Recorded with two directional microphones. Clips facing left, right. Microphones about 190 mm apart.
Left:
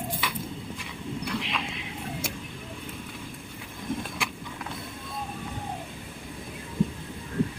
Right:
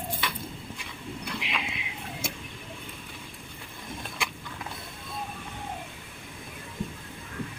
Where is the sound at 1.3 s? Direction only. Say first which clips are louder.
Left 2 dB; 5° right (ahead or behind).